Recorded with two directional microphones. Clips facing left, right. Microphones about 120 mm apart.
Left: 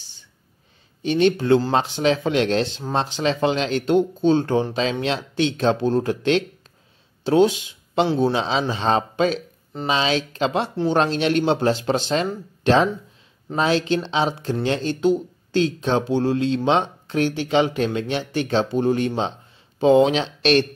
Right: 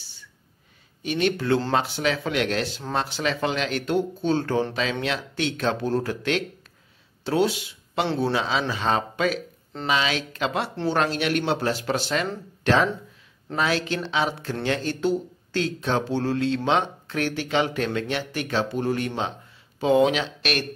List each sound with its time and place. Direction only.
1.0 s speech: 25° left (ahead or behind)